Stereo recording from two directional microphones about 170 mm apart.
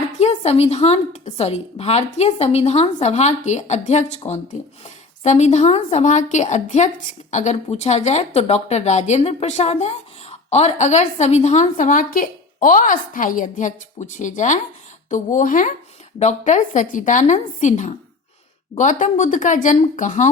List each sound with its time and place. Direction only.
0.2 s a woman's voice: 40° left (ahead or behind)